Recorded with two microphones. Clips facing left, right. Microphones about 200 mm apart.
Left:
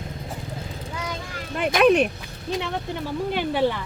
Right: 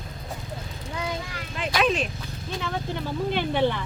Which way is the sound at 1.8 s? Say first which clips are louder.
Left 8 dB; 65° left (ahead or behind).